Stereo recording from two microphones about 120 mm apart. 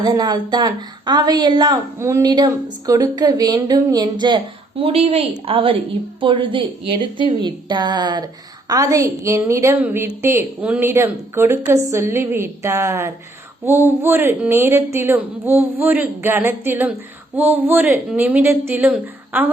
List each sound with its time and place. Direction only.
0.0 s speech: 35° right (ahead or behind)
2.0 s speech: 25° right (ahead or behind)
4.8 s a woman's voice: 55° right (ahead or behind); by 19.5 s 15° right (ahead or behind)